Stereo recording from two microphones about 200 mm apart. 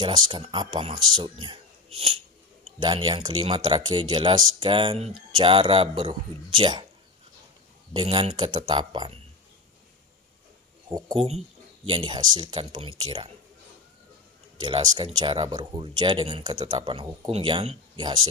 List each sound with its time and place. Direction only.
0.0 s speech: 25° right (ahead or behind)
7.9 s speech: 25° right (ahead or behind)
10.9 s speech: 20° right (ahead or behind)
14.6 s speech: 25° right (ahead or behind)